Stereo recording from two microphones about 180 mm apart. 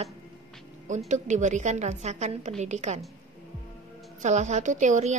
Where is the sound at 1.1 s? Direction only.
40° right (ahead or behind).